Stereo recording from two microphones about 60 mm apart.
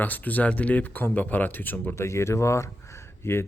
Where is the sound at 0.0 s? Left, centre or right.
Left.